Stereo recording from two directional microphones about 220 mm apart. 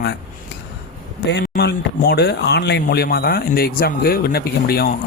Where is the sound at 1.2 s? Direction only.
50° left (ahead or behind).